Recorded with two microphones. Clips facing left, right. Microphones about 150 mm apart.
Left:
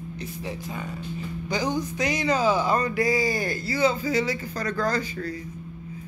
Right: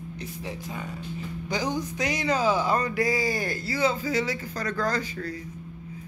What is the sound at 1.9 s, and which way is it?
Speech, 5° right (ahead or behind).